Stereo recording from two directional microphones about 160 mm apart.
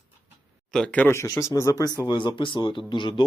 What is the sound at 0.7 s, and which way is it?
Speech, 5° left (ahead or behind).